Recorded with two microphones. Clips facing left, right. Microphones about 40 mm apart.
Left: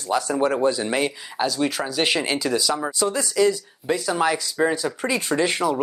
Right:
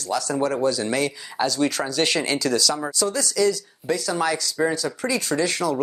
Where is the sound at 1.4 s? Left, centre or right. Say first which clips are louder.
Right 1 dB; centre.